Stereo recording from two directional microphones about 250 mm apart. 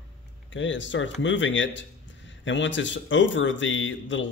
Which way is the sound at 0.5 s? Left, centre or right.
Left.